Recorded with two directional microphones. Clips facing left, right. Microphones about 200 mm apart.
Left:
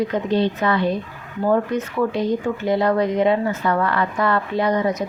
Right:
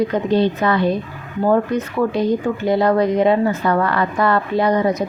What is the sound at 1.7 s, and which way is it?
A woman's voice, 35° right (ahead or behind).